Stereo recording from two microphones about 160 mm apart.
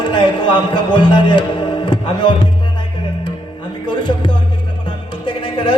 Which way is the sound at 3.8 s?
30° left (ahead or behind).